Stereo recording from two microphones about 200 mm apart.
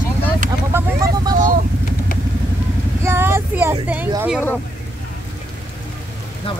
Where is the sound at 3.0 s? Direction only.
15° right (ahead or behind).